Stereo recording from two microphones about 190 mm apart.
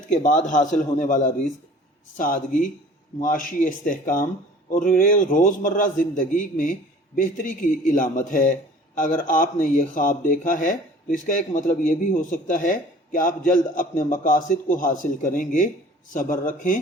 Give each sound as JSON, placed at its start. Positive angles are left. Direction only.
{"t": 0.1, "sound": "a man's voice", "side_deg": 40}